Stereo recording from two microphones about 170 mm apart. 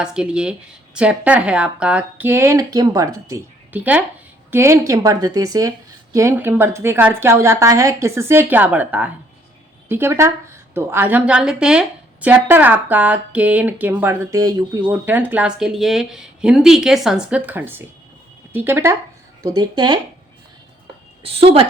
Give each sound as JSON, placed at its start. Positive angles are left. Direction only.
{"t": 0.0, "sound": "a woman's voice", "side_deg": -5}
{"t": 14.8, "sound": "a woman's voice", "side_deg": -10}
{"t": 21.2, "sound": "a woman's voice", "side_deg": -35}